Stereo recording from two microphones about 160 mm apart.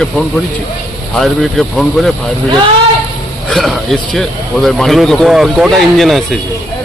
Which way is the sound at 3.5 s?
Centre (ahead or behind).